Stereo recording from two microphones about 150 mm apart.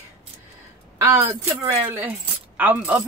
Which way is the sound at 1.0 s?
15° right (ahead or behind).